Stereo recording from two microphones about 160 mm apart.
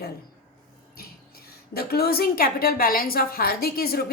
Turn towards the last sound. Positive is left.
turn(degrees=75)  # may be behind; listen again after turning